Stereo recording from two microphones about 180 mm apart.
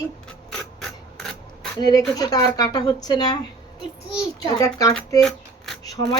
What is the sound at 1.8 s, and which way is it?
Speech, 20° left (ahead or behind).